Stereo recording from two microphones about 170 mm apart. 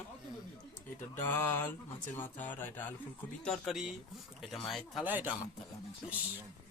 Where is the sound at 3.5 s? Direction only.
Centre (ahead or behind).